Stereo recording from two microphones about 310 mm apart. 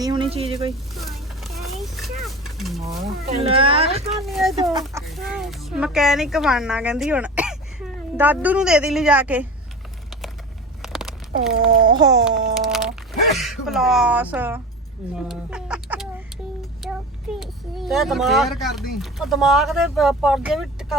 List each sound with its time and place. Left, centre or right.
0.0 s speech: centre
0.7 s a sound: centre
3.5 s speech: centre
4.1 s speech: centre
4.7 s speech: centre
10.8 s a sound: centre
11.9 s speech: centre
12.5 s a sound: centre
13.3 s speech: centre
15.3 s a sound: centre
16.8 s child singing: centre
17.4 s speech: centre